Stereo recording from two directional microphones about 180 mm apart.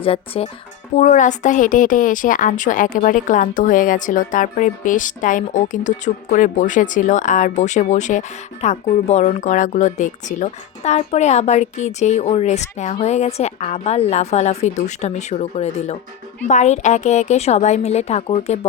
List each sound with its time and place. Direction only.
0.0 s speech: 35° left (ahead or behind)
0.9 s a woman's voice: 45° left (ahead or behind)